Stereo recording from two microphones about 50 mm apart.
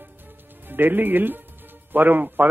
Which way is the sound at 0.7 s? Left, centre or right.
Right.